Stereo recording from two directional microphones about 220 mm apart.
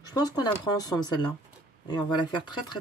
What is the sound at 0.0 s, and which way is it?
Speech, 15° left (ahead or behind).